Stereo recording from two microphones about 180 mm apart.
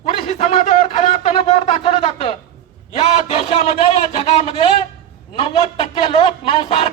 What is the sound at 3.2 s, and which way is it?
Speech, 35° left (ahead or behind).